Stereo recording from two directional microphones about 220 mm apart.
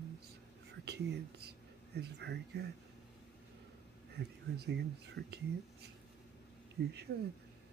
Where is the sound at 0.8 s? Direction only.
50° right (ahead or behind).